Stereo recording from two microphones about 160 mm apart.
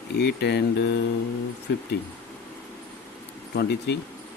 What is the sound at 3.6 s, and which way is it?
Speech, 90° left.